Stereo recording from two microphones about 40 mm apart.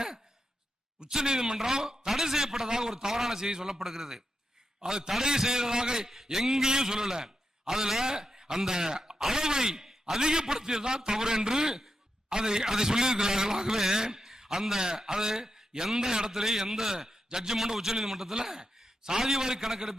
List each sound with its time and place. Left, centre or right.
0.9 s a man's voice: centre